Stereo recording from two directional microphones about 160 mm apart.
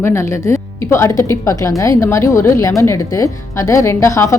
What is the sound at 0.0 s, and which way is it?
A woman's voice, 15° left (ahead or behind).